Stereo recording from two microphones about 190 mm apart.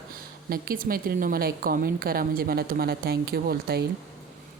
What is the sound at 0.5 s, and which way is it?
A woman's voice, 50° right (ahead or behind).